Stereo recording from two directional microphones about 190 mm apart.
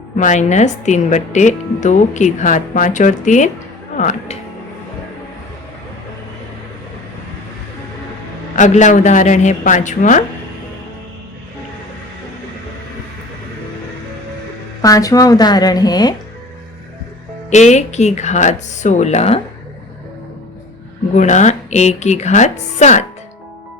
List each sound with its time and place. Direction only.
0.2 s speech: 40° left (ahead or behind)
8.5 s speech: 40° left (ahead or behind)
14.8 s a woman's voice: 20° left (ahead or behind)
17.5 s speech: 35° left (ahead or behind)
21.2 s speech: 40° left (ahead or behind)